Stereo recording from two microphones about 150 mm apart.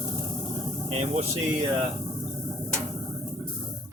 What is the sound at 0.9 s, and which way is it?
Speech, 50° right (ahead or behind).